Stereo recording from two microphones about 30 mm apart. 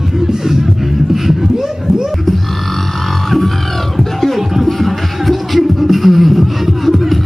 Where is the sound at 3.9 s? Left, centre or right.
Centre.